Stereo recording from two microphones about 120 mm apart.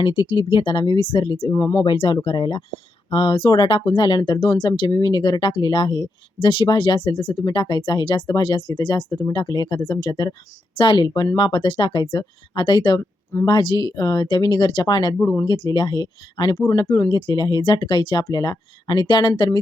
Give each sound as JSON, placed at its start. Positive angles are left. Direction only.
{"t": 0.0, "sound": "speech", "side_deg": 50}
{"t": 9.0, "sound": "speech", "side_deg": 25}
{"t": 9.3, "sound": "speech", "side_deg": 35}